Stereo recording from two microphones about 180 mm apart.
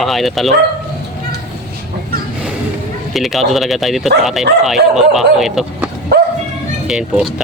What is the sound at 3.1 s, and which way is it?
Speech, centre (ahead or behind).